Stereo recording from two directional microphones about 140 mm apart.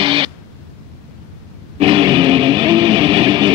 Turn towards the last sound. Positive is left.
turn(degrees=-35)  # may be behind; listen again after turning